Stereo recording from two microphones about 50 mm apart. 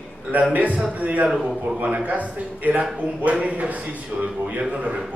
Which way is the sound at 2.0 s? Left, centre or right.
Right.